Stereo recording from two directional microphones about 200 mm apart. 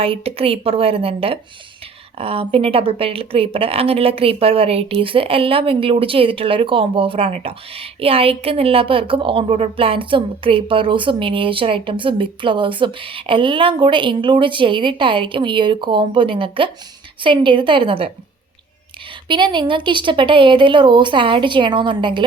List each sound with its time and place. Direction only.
0.0 s speech: 30° right (ahead or behind)
19.3 s speech: 25° right (ahead or behind)